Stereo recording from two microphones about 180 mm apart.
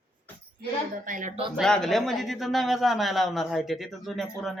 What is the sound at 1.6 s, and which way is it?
Speech, 5° left (ahead or behind).